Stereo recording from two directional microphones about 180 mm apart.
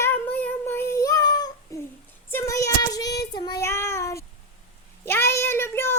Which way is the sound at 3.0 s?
65° left (ahead or behind).